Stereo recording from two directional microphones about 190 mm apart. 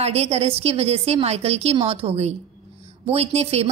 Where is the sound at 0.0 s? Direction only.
35° right (ahead or behind).